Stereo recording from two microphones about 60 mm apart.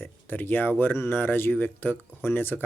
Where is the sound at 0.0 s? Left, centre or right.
Left.